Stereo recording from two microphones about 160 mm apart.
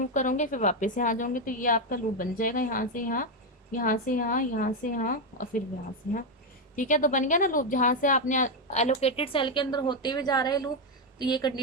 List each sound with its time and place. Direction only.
0.1 s a woman's voice: 50° left (ahead or behind)
6.7 s a woman's voice: 50° left (ahead or behind); by 11.6 s 25° left (ahead or behind)